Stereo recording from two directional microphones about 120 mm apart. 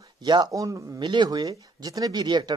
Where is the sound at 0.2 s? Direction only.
40° right (ahead or behind).